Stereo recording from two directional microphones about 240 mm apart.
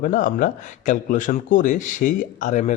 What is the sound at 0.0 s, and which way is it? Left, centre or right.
A man's voice, left.